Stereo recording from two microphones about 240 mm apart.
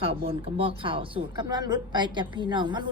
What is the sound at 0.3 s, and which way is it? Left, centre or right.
A woman's voice, right.